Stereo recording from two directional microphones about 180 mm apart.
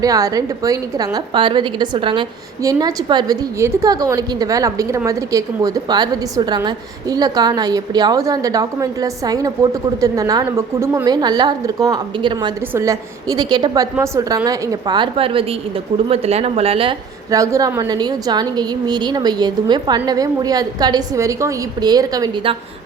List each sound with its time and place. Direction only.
0.0 s a woman's voice: 20° right (ahead or behind)
17.3 s a woman's voice: 20° right (ahead or behind)